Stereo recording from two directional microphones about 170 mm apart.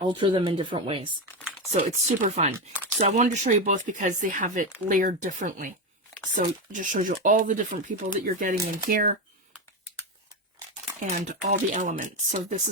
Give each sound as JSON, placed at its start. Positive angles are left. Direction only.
{"t": 0.1, "sound": "speech", "side_deg": -30}
{"t": 1.7, "sound": "speech", "side_deg": -45}
{"t": 11.0, "sound": "speech", "side_deg": -45}